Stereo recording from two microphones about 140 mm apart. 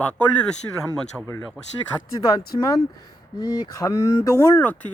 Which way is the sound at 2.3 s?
25° left (ahead or behind).